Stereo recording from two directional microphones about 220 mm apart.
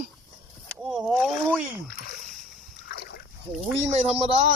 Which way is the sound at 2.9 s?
45° left (ahead or behind).